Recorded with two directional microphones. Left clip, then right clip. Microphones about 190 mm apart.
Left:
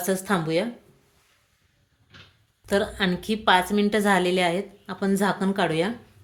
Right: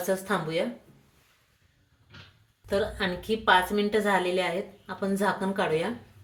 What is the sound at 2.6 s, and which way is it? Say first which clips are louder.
A woman's voice: left 4 dB; 65° left (ahead or behind).